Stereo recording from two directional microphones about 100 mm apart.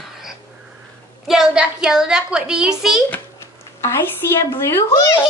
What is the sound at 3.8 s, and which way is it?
A woman's voice, 25° left (ahead or behind).